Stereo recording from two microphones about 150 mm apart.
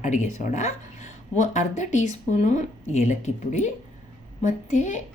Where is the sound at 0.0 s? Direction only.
55° left (ahead or behind).